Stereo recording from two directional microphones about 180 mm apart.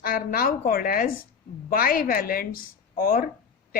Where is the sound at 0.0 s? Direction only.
55° left (ahead or behind).